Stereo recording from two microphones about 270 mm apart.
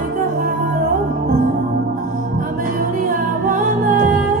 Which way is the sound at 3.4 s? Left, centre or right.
Right.